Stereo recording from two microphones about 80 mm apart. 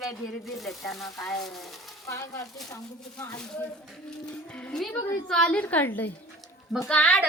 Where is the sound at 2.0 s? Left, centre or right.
Left.